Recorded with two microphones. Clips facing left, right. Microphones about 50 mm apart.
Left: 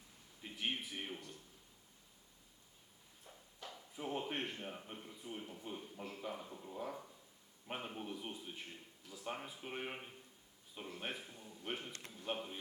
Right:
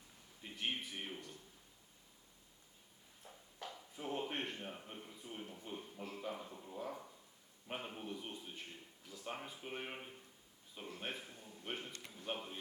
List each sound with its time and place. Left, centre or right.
0.4 s a man's voice: centre
3.6 s a man's voice: centre